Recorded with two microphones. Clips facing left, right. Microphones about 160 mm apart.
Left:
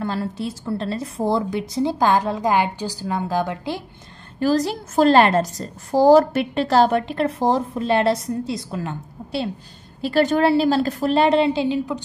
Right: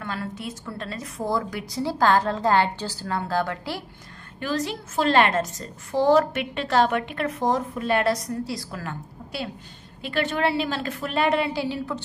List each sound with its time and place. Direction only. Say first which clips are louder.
0.0 s a woman's voice: left 6 dB; 30° left (ahead or behind)
4.4 s a woman's voice: left 8 dB; 35° left (ahead or behind)
10.0 s a woman's voice: left 7 dB; 40° left (ahead or behind); by 12.0 s 20° left (ahead or behind)